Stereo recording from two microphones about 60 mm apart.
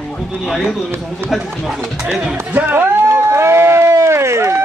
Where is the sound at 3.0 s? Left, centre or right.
Right.